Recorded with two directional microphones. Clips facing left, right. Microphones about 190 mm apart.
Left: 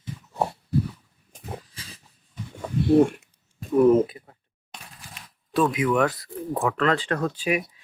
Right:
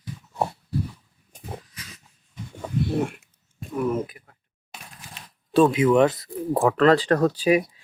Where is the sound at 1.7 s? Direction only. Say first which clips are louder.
Even; 30° left (ahead or behind).